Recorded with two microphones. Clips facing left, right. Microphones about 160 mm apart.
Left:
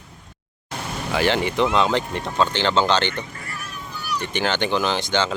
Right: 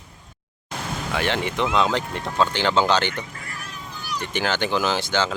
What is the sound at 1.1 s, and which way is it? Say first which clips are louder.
Speech: left 4 dB; centre (ahead or behind).